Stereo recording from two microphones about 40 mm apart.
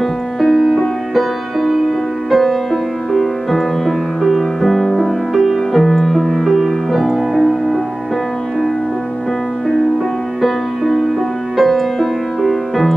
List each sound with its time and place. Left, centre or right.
0.0 s music: centre
11.5 s music: centre